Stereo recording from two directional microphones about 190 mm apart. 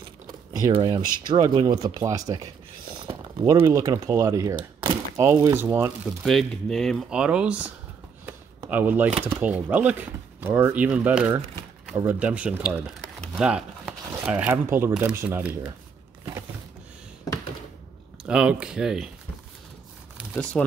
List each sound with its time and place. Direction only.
0.3 s a sound: 20° right (ahead or behind)
1.2 s speech: 25° right (ahead or behind)
2.9 s a sound: 25° right (ahead or behind)
3.4 s speech: 15° right (ahead or behind)
4.8 s thunk: 20° right (ahead or behind)
5.3 s speech: 10° right (ahead or behind)
6.2 s speech: 5° left (ahead or behind)
8.3 s a sound: 10° right (ahead or behind)
9.3 s speech: 10° right (ahead or behind)
13.3 s a sound: 5° right (ahead or behind)
14.2 s speech: 10° right (ahead or behind)
18.2 s speech: 5° right (ahead or behind)
20.3 s speech: 5° left (ahead or behind)